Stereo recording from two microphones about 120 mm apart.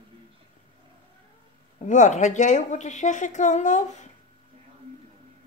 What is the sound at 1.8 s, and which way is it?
A woman's voice, 85° left.